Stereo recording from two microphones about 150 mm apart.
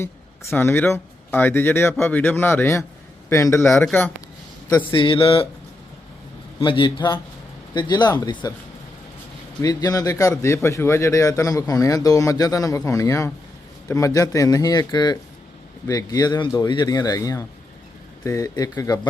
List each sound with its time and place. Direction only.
0.5 s speech: 15° left (ahead or behind)
4.9 s speech: 35° left (ahead or behind)
6.6 s a man's voice: 35° left (ahead or behind)
9.6 s a man's voice: 25° left (ahead or behind)